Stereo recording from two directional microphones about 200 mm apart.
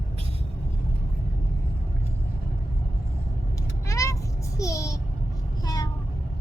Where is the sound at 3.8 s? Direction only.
15° left (ahead or behind).